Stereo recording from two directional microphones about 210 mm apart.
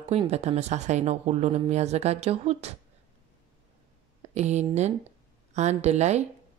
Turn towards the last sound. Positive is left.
turn(degrees=-30)  # may be behind; listen again after turning